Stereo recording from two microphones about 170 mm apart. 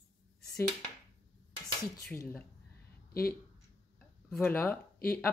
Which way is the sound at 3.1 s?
60° left (ahead or behind).